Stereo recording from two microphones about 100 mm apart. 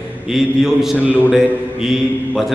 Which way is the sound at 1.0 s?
15° right (ahead or behind).